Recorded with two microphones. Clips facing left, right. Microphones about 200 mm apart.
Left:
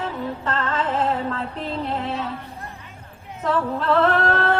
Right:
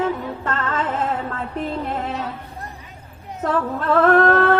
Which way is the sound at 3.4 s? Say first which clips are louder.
Right 1 dB; 50° right (ahead or behind).